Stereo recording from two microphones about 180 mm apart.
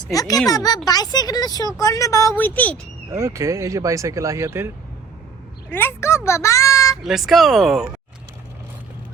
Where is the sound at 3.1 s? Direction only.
15° right (ahead or behind).